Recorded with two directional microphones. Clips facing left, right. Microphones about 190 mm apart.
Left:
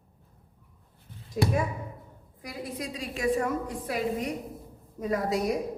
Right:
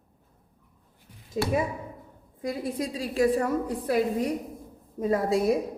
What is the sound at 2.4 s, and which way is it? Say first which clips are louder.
A woman's voice: right 6 dB; 30° right (ahead or behind).